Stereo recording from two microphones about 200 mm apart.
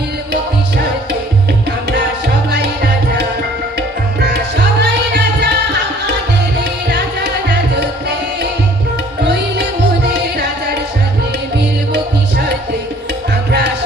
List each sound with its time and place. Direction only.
3.8 s tabla: 55° right (ahead or behind)
6.8 s music: 60° right (ahead or behind)
9.2 s music: 60° right (ahead or behind)
13.5 s music: 60° right (ahead or behind)